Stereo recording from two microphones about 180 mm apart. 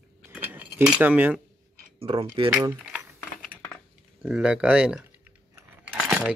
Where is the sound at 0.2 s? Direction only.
10° right (ahead or behind).